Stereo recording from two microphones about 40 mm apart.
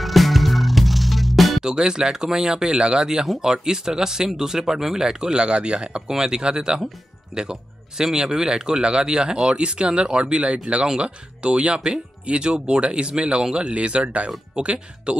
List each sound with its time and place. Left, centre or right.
0.0 s music: centre
1.6 s speech: centre
8.0 s speech: centre; by 15.1 s right